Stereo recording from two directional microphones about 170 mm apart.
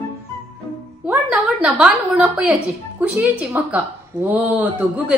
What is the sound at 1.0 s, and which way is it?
A woman's voice, 10° right (ahead or behind).